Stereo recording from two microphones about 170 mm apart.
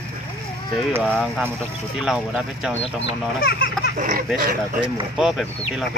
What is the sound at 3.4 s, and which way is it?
Speech, 70° left (ahead or behind).